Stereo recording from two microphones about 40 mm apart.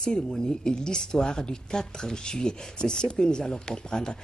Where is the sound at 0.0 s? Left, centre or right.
Centre.